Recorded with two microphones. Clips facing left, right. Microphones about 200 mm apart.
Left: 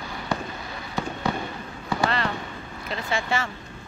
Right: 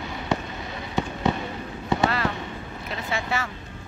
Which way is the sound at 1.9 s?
20° right (ahead or behind).